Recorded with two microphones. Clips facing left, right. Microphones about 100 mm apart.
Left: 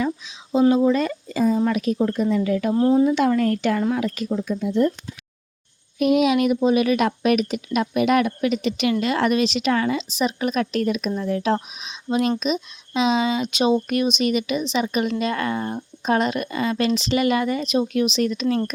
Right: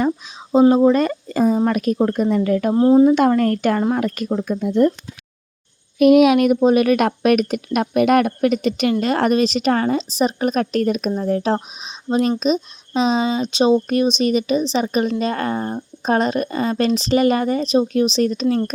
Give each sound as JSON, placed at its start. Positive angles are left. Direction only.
{"t": 0.7, "sound": "speech", "side_deg": -45}
{"t": 2.7, "sound": "speech", "side_deg": -30}
{"t": 3.1, "sound": "speech", "side_deg": -45}
{"t": 6.0, "sound": "speech", "side_deg": -65}